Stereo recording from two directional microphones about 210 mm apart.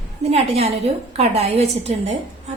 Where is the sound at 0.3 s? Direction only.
30° right (ahead or behind).